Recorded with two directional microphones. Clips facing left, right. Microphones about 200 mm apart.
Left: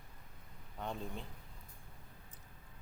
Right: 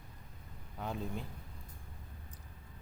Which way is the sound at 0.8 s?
5° right (ahead or behind).